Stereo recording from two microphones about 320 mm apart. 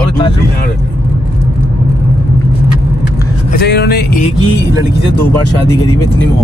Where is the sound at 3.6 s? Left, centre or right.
Left.